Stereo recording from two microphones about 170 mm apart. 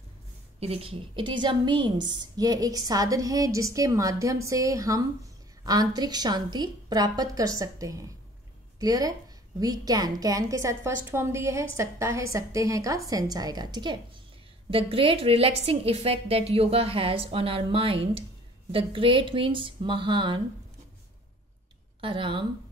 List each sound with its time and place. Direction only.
0.6 s a woman's voice: 35° right (ahead or behind)
22.0 s a woman's voice: 30° right (ahead or behind)